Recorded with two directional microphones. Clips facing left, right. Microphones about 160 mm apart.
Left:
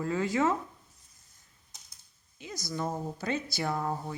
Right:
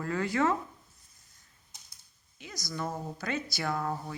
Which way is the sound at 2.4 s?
15° left (ahead or behind).